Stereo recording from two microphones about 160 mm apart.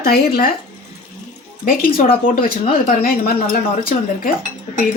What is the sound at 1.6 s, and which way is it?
A woman's voice, 65° left (ahead or behind).